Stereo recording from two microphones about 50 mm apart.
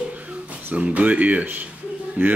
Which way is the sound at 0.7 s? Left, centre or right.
Right.